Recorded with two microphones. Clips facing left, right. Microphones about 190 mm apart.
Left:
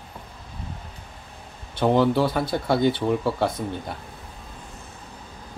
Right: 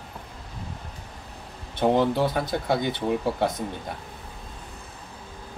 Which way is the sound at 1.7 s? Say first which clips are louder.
Left 2 dB; 20° right (ahead or behind).